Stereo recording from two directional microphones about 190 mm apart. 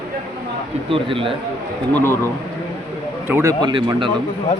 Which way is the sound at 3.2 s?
15° right (ahead or behind).